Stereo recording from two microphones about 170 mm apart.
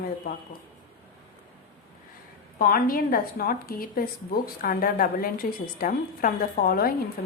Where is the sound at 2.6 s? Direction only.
60° left (ahead or behind).